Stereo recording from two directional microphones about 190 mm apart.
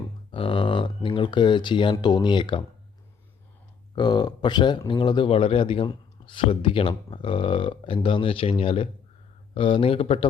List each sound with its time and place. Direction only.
0.3 s speech: 25° left (ahead or behind)
3.9 s speech: 20° left (ahead or behind)